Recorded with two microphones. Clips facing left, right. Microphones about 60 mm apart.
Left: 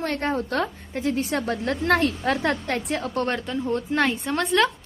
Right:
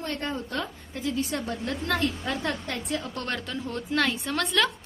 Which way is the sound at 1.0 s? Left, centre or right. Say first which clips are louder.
Left 4 dB; left.